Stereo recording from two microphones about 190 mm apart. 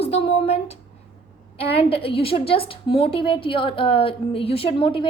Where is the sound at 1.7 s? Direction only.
30° left (ahead or behind).